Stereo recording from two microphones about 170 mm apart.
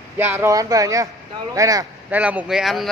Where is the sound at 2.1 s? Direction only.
10° right (ahead or behind).